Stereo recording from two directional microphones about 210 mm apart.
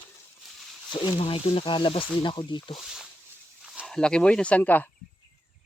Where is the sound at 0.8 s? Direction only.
25° left (ahead or behind).